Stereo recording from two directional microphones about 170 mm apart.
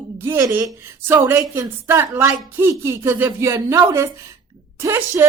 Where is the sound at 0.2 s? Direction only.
15° right (ahead or behind).